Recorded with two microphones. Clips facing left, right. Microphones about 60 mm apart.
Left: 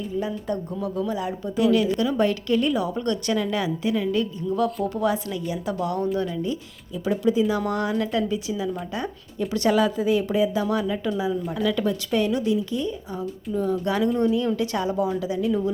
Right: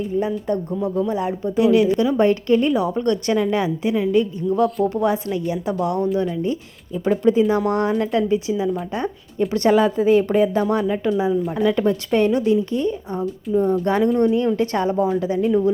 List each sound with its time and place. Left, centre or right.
0.2 s a woman's voice: right
7.0 s speech: right
7.7 s speech: right